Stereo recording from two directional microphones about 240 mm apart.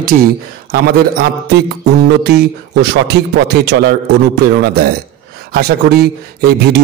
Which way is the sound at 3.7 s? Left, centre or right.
Right.